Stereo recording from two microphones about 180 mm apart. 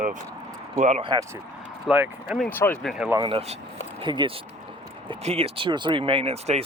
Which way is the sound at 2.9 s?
5° right (ahead or behind).